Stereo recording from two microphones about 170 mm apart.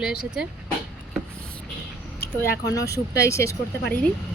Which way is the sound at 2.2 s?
70° left (ahead or behind).